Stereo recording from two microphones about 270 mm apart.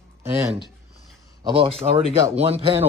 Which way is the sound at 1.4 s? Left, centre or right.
Right.